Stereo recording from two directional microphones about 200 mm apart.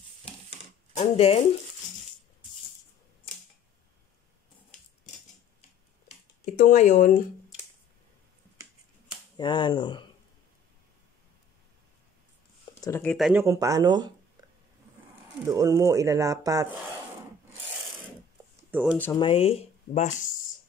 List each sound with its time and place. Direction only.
0.9 s speech: 30° left (ahead or behind)
6.0 s a sound: 35° left (ahead or behind)
9.4 s speech: 20° left (ahead or behind)
12.8 s speech: 10° left (ahead or behind)
13.3 s speech: 15° right (ahead or behind)
15.4 s speech: 15° right (ahead or behind)
18.7 s speech: 5° right (ahead or behind)
19.1 s speech: 25° left (ahead or behind)